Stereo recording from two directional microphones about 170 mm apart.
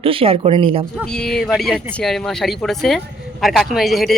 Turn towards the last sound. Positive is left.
turn(degrees=0)  # may be behind; listen again after turning